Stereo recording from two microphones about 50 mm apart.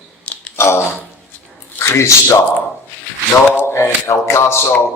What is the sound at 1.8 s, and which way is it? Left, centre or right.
Speech, left.